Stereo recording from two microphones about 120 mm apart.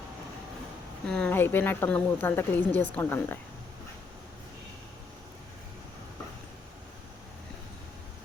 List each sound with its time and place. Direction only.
1.0 s speech: 5° left (ahead or behind)
1.3 s a woman's voice: 15° left (ahead or behind)